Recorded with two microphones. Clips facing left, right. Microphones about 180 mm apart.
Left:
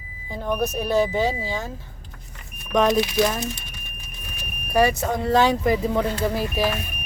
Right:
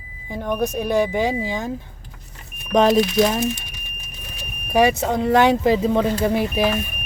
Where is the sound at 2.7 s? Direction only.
25° right (ahead or behind).